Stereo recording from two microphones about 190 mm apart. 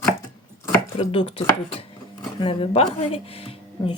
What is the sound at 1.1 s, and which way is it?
Speech, 30° left (ahead or behind).